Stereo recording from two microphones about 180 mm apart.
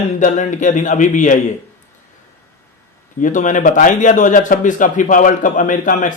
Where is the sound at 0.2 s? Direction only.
45° left (ahead or behind).